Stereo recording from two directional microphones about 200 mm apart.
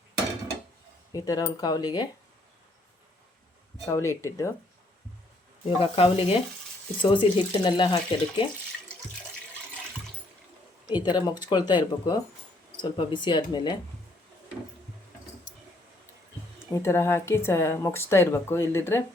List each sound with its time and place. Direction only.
1.1 s speech: 20° left (ahead or behind)
3.8 s speech: 15° left (ahead or behind)
5.6 s speech: 30° left (ahead or behind)
10.8 s speech: 20° left (ahead or behind)
16.7 s speech: 15° left (ahead or behind)